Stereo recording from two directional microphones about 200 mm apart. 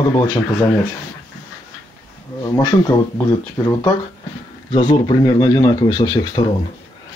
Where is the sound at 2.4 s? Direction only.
15° left (ahead or behind).